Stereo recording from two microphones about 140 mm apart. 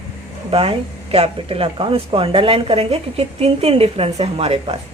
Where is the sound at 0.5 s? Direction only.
45° right (ahead or behind).